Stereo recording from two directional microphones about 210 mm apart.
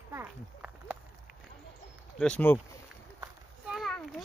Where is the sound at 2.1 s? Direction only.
5° left (ahead or behind).